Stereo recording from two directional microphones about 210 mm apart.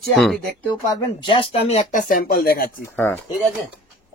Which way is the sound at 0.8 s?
20° left (ahead or behind).